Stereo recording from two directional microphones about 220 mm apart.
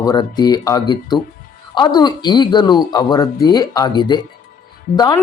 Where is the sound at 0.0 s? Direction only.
20° left (ahead or behind).